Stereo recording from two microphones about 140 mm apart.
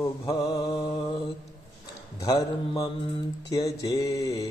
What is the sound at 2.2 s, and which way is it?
Mantra, 25° left (ahead or behind).